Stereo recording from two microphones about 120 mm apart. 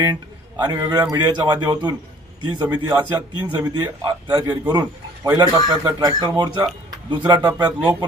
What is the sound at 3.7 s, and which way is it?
A man's voice, 35° right (ahead or behind).